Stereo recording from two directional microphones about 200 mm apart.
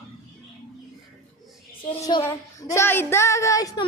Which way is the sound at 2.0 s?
20° left (ahead or behind).